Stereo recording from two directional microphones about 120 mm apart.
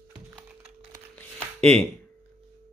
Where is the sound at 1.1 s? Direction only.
10° left (ahead or behind).